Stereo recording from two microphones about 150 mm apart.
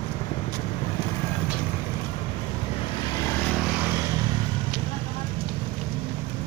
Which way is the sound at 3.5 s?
5° right (ahead or behind).